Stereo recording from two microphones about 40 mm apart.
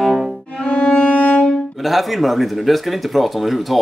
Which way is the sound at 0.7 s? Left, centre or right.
Left.